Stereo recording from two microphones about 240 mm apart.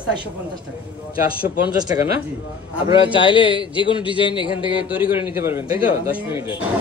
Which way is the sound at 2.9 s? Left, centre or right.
Left.